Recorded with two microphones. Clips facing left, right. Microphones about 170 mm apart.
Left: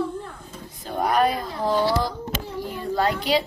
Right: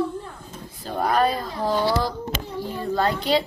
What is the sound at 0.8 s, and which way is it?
Speech, 10° left (ahead or behind).